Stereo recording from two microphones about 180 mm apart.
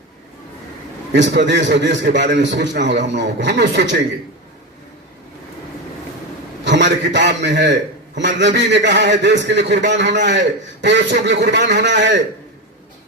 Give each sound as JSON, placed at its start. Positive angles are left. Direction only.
{"t": 1.1, "sound": "a man's voice", "side_deg": -75}
{"t": 6.7, "sound": "a man's voice", "side_deg": -80}